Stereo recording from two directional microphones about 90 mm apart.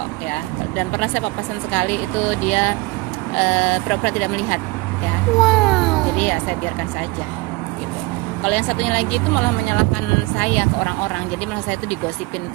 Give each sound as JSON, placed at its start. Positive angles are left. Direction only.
{"t": 0.8, "sound": "speech", "side_deg": 20}
{"t": 5.4, "sound": "a sound", "side_deg": 0}
{"t": 8.4, "sound": "speech", "side_deg": 15}